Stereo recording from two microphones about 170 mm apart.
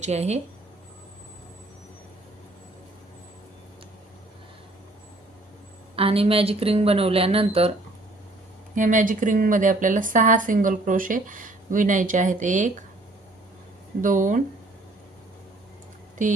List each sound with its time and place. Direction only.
0.0 s speech: 40° right (ahead or behind)
6.0 s speech: 35° right (ahead or behind)
8.7 s speech: 50° right (ahead or behind)
14.0 s speech: 50° right (ahead or behind)
16.2 s speech: 45° right (ahead or behind)